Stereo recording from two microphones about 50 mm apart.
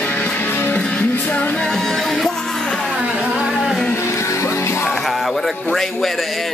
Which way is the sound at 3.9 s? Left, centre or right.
Left.